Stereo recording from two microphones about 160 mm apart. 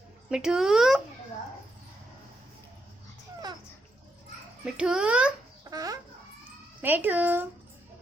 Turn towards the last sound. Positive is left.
turn(degrees=-10)  # may be behind; listen again after turning